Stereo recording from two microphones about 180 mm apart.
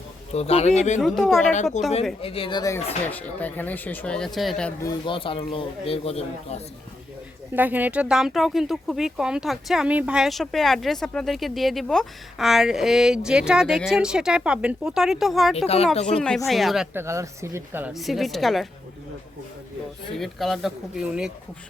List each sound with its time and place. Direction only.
0.3 s speech: 35° left (ahead or behind)
1.0 s speech: centre (ahead or behind)
1.8 s speech: 40° left (ahead or behind); by 4.7 s centre (ahead or behind)
4.8 s a man's voice: 25° left (ahead or behind)
7.5 s speech: 10° right (ahead or behind)
15.5 s speech: 35° left (ahead or behind)
16.0 s a woman's voice: 5° left (ahead or behind); by 17.9 s 10° right (ahead or behind)
17.9 s speech: centre (ahead or behind)
20.1 s speech: centre (ahead or behind)